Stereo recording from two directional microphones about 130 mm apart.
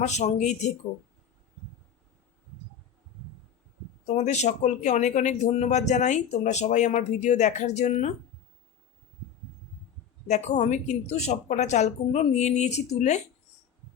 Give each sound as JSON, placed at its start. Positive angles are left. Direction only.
{"t": 0.0, "sound": "speech", "side_deg": 65}
{"t": 4.0, "sound": "speech", "side_deg": 60}
{"t": 10.2, "sound": "speech", "side_deg": 65}